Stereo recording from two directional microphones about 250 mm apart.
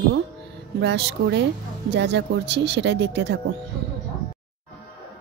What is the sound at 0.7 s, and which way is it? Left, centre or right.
Speech, right.